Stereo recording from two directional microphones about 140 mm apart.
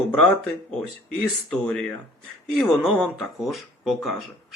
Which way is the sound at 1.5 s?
5° left (ahead or behind).